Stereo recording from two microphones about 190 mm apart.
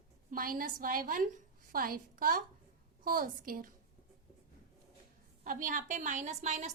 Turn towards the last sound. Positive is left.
turn(degrees=-40)  # may be behind; listen again after turning